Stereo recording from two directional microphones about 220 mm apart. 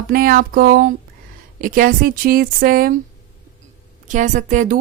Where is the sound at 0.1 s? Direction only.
40° right (ahead or behind).